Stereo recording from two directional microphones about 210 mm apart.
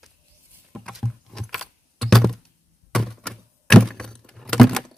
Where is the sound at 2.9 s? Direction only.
Centre (ahead or behind).